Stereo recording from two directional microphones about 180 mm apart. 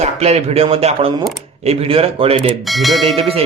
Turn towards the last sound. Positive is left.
turn(degrees=0)  # may be behind; listen again after turning